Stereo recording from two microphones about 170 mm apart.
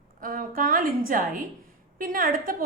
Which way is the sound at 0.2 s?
55° right (ahead or behind).